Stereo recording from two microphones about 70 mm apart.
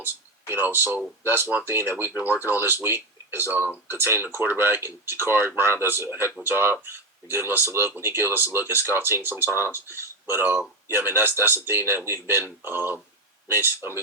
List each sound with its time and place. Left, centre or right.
0.0 s speech: right